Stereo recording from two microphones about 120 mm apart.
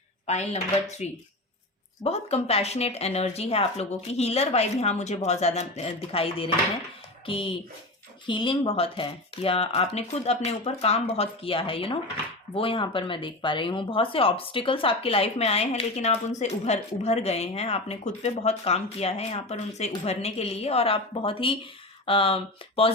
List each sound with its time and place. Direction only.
0.3 s speech: 65° left (ahead or behind)
2.0 s speech: 60° left (ahead or behind)